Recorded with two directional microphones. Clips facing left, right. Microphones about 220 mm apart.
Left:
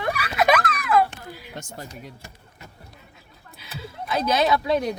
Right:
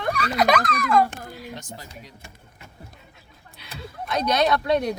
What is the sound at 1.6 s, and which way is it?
Speech, 50° left (ahead or behind).